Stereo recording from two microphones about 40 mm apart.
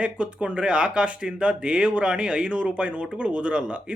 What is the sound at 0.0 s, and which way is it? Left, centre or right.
Speech, right.